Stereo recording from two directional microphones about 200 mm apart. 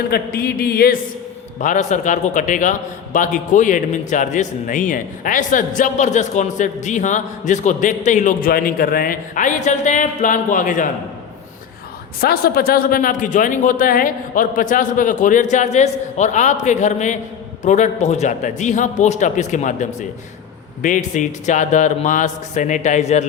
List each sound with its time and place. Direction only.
0.1 s speech: 50° left (ahead or behind)
1.5 s a man's voice: 40° left (ahead or behind)
12.2 s a man's voice: 50° left (ahead or behind)